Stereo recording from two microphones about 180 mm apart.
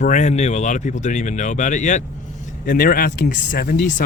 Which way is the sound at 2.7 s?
55° left (ahead or behind).